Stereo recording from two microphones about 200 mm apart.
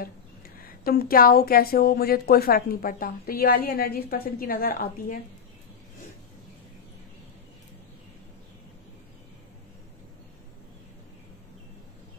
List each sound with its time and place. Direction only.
0.6 s speech: 50° left (ahead or behind)